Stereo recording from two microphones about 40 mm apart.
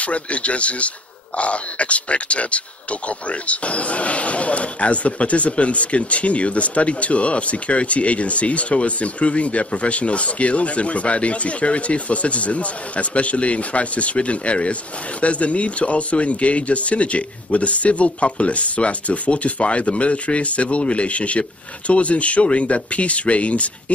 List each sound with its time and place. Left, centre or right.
0.0 s speech: left